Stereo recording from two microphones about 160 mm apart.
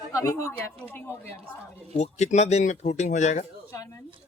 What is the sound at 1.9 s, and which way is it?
A man's voice, 45° left (ahead or behind).